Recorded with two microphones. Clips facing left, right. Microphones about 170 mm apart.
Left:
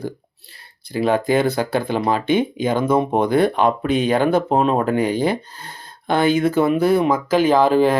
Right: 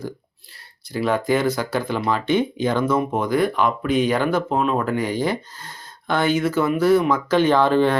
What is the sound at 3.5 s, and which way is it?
Speech, 25° left (ahead or behind).